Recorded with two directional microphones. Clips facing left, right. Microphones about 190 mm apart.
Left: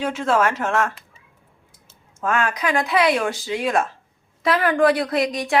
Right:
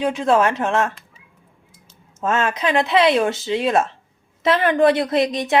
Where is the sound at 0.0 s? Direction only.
20° right (ahead or behind).